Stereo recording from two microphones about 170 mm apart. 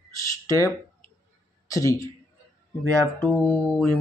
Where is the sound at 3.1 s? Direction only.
10° left (ahead or behind).